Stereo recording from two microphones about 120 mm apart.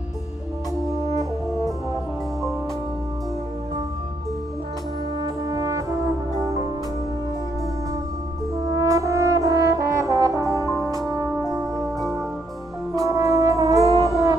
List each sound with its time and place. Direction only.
5.2 s brass instrument: 30° right (ahead or behind)
8.6 s brass instrument: 25° right (ahead or behind)
10.4 s brass instrument: 30° left (ahead or behind)
13.0 s brass instrument: 25° right (ahead or behind)